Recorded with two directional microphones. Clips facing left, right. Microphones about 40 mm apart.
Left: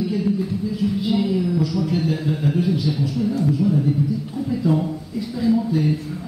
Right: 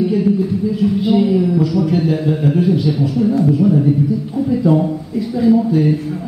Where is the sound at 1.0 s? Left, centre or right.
Right.